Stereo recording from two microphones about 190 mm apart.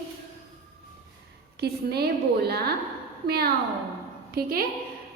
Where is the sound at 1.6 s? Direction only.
60° right (ahead or behind).